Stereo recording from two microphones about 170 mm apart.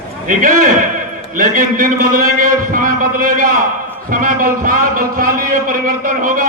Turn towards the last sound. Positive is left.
turn(degrees=-50)  # may be behind; listen again after turning